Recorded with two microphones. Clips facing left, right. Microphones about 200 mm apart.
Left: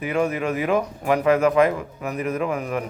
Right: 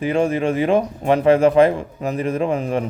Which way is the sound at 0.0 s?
30° right (ahead or behind).